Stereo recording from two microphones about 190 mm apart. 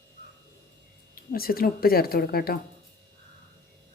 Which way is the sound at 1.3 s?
50° left (ahead or behind).